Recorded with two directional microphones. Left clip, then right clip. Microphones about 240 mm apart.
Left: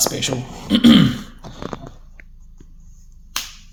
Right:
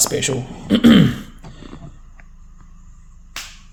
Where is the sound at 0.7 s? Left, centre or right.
Right.